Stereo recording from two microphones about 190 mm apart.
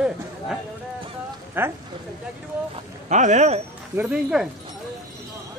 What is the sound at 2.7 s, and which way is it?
Speech, 40° right (ahead or behind).